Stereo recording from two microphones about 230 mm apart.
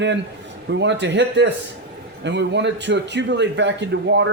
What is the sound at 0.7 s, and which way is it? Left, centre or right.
Speech, right.